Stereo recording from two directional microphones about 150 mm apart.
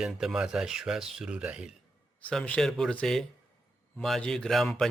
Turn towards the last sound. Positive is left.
turn(degrees=0)  # may be behind; listen again after turning